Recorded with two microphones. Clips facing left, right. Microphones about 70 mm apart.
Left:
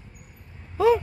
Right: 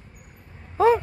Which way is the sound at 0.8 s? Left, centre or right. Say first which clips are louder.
Right 1 dB; right.